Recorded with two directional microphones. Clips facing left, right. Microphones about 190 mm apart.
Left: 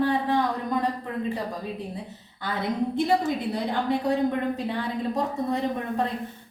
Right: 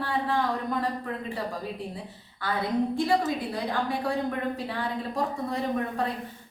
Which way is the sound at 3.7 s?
20° left (ahead or behind).